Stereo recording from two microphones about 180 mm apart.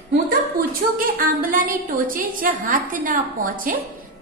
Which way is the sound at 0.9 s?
50° right (ahead or behind).